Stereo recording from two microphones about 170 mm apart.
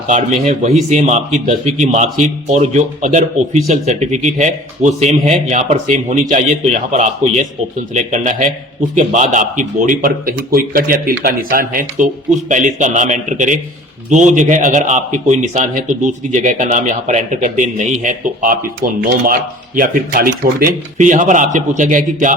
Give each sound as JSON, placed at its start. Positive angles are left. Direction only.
{"t": 0.1, "sound": "a man's voice", "side_deg": -40}